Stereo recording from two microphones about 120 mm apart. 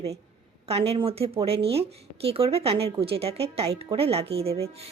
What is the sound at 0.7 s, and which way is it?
A woman's voice, 55° right (ahead or behind).